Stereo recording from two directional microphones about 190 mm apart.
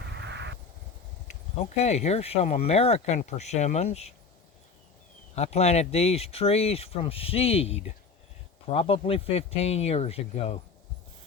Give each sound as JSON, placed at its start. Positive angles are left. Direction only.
{"t": 0.1, "sound": "a sound", "side_deg": -65}
{"t": 1.8, "sound": "speech", "side_deg": 35}
{"t": 5.3, "sound": "speech", "side_deg": 35}